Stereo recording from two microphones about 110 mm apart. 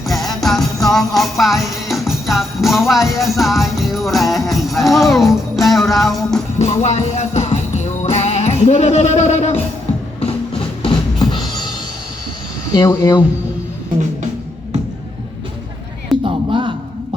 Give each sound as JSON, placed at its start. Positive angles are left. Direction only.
{"t": 0.1, "sound": "music", "side_deg": 0}
{"t": 6.6, "sound": "music", "side_deg": 80}
{"t": 10.2, "sound": "music", "side_deg": 60}
{"t": 12.8, "sound": "speech", "side_deg": 40}
{"t": 16.2, "sound": "a sound", "side_deg": -50}